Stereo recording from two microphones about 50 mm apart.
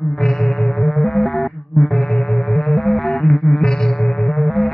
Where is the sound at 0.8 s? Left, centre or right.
Centre.